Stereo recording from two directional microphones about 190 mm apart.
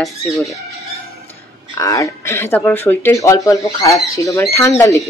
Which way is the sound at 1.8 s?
15° left (ahead or behind).